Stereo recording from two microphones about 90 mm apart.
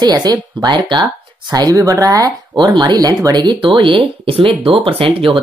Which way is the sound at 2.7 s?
55° right (ahead or behind).